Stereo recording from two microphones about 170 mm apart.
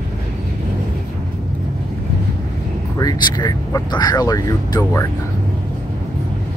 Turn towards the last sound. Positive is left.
turn(degrees=20)  # may be behind; listen again after turning